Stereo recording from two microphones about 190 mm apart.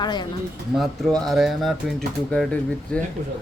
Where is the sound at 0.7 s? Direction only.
Centre (ahead or behind).